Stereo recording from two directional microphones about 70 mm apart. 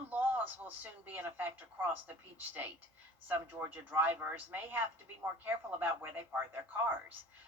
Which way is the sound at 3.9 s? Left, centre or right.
Right.